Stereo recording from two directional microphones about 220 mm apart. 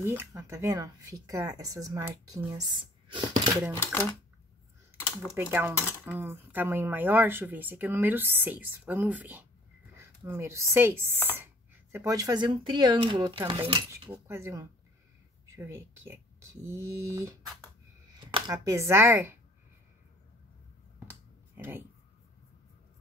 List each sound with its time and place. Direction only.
0.0 s speech: 10° right (ahead or behind)
5.3 s a woman's voice: 10° right (ahead or behind)
18.5 s speech: 15° right (ahead or behind)
21.1 s a sound: 10° right (ahead or behind)